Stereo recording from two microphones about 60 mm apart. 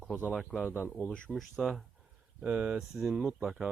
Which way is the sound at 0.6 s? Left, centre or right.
Left.